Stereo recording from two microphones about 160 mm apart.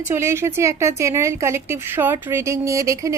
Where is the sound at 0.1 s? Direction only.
15° right (ahead or behind).